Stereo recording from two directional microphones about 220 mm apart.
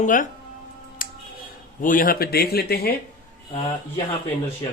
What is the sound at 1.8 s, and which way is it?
Speech, 40° left (ahead or behind).